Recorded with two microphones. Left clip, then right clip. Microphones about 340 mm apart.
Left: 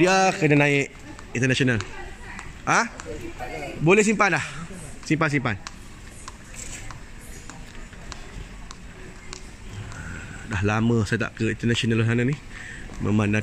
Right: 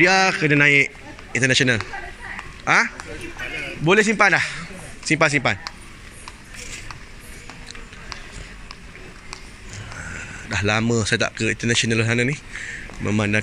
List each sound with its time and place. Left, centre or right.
0.0 s a man's voice: centre
10.5 s speech: centre